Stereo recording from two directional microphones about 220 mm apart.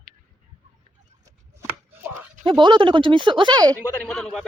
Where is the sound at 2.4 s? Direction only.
20° right (ahead or behind).